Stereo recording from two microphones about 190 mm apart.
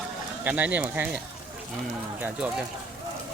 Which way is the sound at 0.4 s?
10° right (ahead or behind).